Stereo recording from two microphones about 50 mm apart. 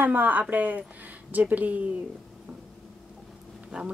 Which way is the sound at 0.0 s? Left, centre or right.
Right.